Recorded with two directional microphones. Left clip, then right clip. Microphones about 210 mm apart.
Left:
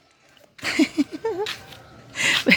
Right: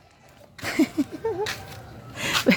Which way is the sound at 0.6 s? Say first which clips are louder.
Left 3 dB; 15° left (ahead or behind).